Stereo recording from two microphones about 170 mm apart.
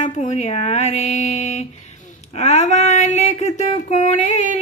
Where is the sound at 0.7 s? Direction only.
40° left (ahead or behind).